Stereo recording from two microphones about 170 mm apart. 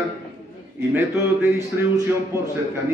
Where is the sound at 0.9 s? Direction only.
15° right (ahead or behind).